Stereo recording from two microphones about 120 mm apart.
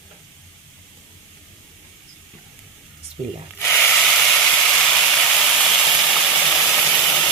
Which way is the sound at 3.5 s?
20° left (ahead or behind).